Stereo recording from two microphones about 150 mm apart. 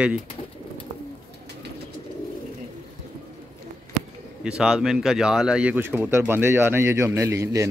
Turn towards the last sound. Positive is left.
turn(degrees=-20)  # may be behind; listen again after turning